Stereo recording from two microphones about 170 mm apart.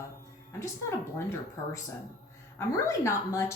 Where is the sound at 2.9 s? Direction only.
15° left (ahead or behind).